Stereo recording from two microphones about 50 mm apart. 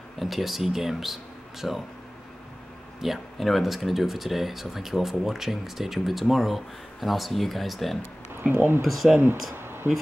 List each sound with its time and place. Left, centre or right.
0.2 s speech: centre
3.0 s speech: centre
8.5 s speech: right
8.8 s speech: centre
9.6 s a sound: right